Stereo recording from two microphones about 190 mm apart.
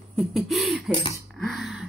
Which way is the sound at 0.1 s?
Centre (ahead or behind).